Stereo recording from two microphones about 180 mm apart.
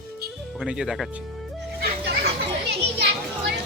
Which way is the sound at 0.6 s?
Centre (ahead or behind).